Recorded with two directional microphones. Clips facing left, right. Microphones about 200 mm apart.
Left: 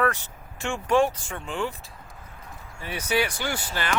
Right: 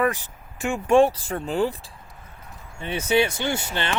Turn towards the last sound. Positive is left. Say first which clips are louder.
# right 3 dB
turn(degrees=-25)  # may be behind; listen again after turning